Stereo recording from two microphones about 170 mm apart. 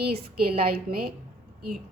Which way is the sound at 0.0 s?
70° right (ahead or behind).